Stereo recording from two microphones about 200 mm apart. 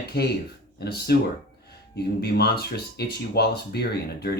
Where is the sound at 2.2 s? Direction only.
55° left (ahead or behind).